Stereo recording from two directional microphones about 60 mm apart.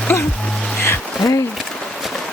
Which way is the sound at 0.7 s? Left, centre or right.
Left.